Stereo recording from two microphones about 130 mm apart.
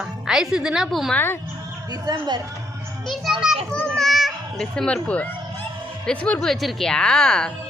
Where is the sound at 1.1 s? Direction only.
15° left (ahead or behind).